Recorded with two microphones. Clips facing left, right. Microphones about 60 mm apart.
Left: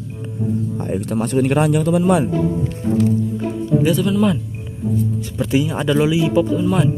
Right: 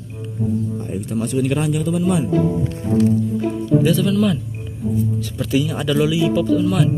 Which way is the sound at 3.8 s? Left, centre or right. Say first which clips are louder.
Left 2 dB; centre.